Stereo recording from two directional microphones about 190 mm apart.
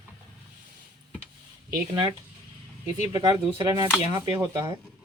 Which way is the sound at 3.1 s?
20° right (ahead or behind).